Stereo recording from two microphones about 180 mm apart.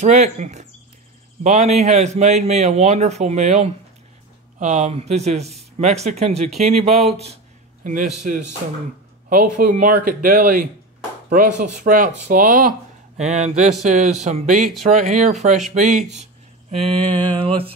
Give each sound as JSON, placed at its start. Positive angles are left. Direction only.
{"t": 0.0, "sound": "a man's voice", "side_deg": -40}
{"t": 7.8, "sound": "a man's voice", "side_deg": -45}